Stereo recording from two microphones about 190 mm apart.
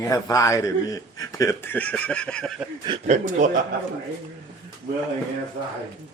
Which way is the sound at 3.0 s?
40° right (ahead or behind).